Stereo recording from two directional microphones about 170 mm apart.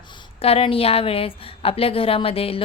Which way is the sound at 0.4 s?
35° left (ahead or behind).